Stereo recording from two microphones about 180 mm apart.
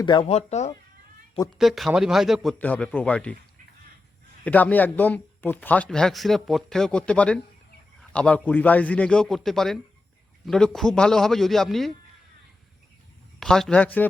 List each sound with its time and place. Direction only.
0.0 s speech: 30° left (ahead or behind)
1.5 s a man's voice: centre (ahead or behind)
4.4 s a man's voice: 10° left (ahead or behind)
13.4 s a man's voice: 5° left (ahead or behind)